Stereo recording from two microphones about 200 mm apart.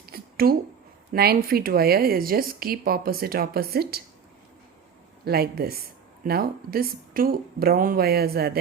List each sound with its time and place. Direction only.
0.0 s a sound: 50° right (ahead or behind)
1.1 s a woman's voice: 50° right (ahead or behind)
5.2 s a woman's voice: 50° right (ahead or behind)